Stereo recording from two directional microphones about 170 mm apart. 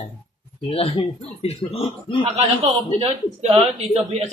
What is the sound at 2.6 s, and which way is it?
Speech, 35° right (ahead or behind).